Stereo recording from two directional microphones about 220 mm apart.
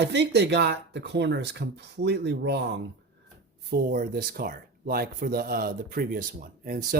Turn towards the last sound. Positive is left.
turn(degrees=-40)  # may be behind; listen again after turning